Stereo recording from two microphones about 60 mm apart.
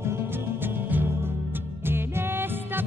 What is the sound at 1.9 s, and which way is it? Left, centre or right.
Music, right.